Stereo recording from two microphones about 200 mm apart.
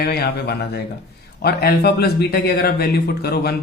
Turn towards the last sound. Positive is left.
turn(degrees=50)  # may be behind; listen again after turning